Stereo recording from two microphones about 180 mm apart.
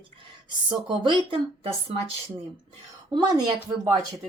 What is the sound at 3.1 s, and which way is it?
Speech, 25° right (ahead or behind).